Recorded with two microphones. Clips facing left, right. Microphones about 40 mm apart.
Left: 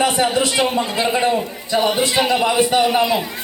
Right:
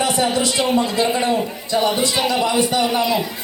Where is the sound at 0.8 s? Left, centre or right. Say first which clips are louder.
Even; left.